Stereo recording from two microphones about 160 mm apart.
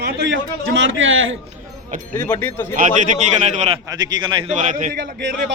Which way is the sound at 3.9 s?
25° right (ahead or behind).